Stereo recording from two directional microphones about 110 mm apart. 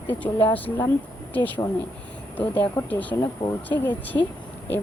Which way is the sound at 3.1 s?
30° left (ahead or behind).